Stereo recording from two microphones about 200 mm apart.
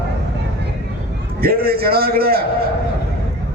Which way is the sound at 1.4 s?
50° right (ahead or behind).